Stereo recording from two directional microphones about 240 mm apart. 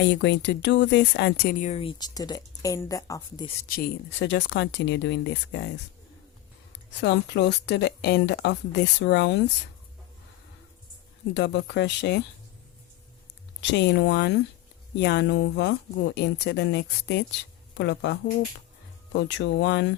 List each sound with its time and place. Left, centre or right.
0.0 s speech: left; by 3.5 s centre
3.6 s speech: left
6.9 s speech: left
11.3 s speech: left
13.6 s speech: left